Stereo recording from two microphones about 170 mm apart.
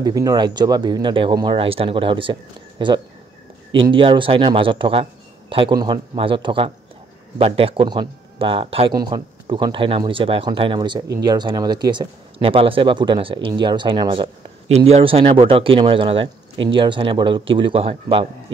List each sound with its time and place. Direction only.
0.0 s speech: 20° right (ahead or behind)
3.7 s speech: 30° right (ahead or behind)